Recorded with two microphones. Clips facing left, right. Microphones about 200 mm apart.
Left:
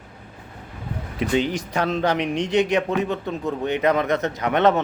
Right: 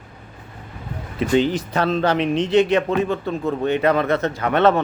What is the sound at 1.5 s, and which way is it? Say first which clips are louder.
A man's voice: right 3 dB; 15° left (ahead or behind).